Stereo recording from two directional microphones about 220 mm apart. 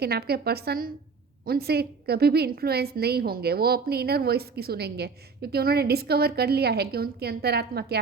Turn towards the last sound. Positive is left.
turn(degrees=-45)  # may be behind; listen again after turning